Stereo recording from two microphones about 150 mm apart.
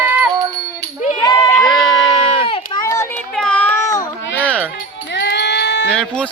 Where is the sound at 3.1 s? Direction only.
5° left (ahead or behind).